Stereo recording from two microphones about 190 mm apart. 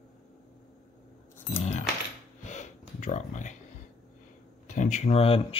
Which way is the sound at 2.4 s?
40° left (ahead or behind).